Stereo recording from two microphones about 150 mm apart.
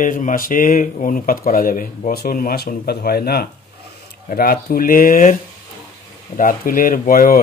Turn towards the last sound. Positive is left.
turn(degrees=75)  # may be behind; listen again after turning